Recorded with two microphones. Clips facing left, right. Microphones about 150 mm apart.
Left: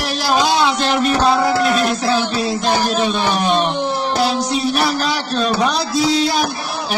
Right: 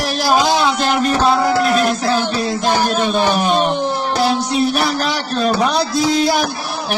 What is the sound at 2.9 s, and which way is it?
Speech, 45° right (ahead or behind).